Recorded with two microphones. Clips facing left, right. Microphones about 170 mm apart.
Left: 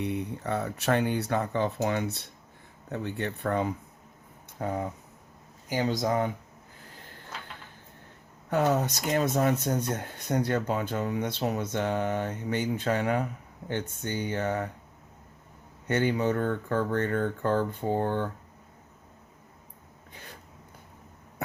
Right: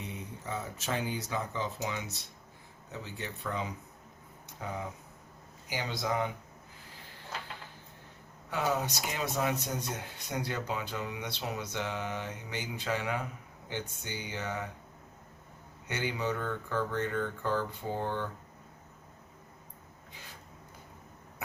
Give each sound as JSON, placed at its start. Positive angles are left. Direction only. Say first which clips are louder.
{"t": 0.0, "sound": "speech", "louder": "left 10 dB", "side_deg": 65}
{"t": 8.4, "sound": "speech", "louder": "left 6 dB", "side_deg": 50}
{"t": 15.9, "sound": "speech", "louder": "left 8 dB", "side_deg": 50}